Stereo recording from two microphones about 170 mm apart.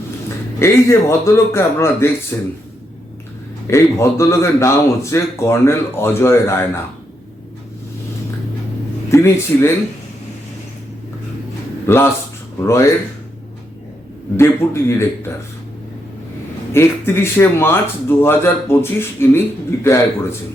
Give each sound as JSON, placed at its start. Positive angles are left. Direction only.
{"t": 0.6, "sound": "speech", "side_deg": 15}
{"t": 3.7, "sound": "speech", "side_deg": 15}
{"t": 9.0, "sound": "speech", "side_deg": 15}
{"t": 11.9, "sound": "speech", "side_deg": 15}
{"t": 14.3, "sound": "speech", "side_deg": 15}
{"t": 16.7, "sound": "speech", "side_deg": 15}